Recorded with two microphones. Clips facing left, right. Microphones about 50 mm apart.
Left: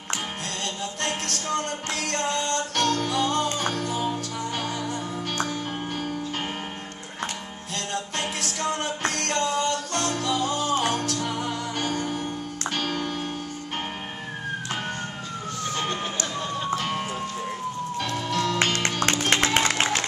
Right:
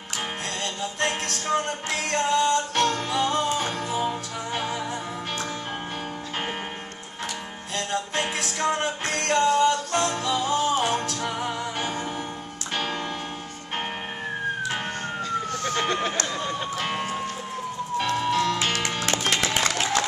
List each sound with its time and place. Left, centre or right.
1.0 s music: centre
7.7 s music: centre
10.8 s music: right
11.1 s music: centre
15.6 s emergency vehicle: right
16.3 s music: centre
17.9 s music: right
18.6 s music: left